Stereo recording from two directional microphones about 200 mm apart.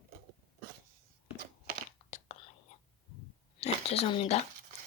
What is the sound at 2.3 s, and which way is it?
Whispering, 35° left (ahead or behind).